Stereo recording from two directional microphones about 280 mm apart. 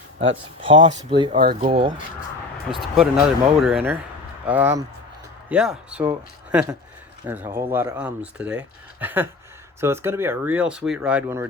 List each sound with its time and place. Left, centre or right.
0.2 s speech: centre
2.7 s speech: centre